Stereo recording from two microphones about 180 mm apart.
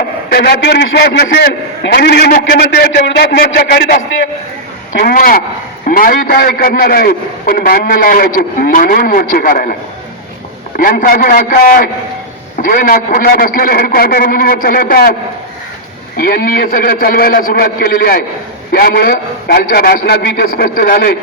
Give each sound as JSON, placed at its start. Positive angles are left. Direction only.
{"t": 0.3, "sound": "a man's voice", "side_deg": 60}
{"t": 10.8, "sound": "a man's voice", "side_deg": 55}
{"t": 16.1, "sound": "a man's voice", "side_deg": 55}